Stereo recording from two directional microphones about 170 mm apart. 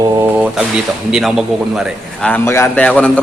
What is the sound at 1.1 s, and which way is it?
A man's voice, centre (ahead or behind).